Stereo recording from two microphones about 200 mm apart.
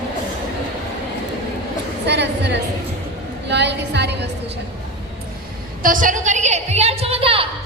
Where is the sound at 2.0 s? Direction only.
60° right (ahead or behind).